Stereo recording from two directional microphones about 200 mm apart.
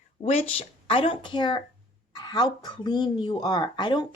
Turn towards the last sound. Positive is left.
turn(degrees=25)  # may be behind; listen again after turning